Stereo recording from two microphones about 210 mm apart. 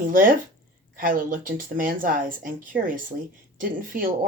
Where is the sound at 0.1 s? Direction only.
40° right (ahead or behind).